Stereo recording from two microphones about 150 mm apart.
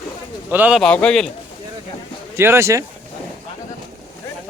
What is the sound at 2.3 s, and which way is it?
Speech, 15° right (ahead or behind).